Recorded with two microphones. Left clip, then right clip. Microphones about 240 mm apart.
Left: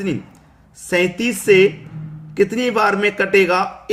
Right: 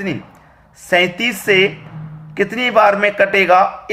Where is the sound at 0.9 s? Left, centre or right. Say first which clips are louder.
Right 4 dB; centre.